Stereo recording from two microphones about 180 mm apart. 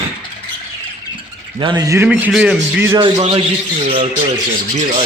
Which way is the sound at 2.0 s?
5° right (ahead or behind).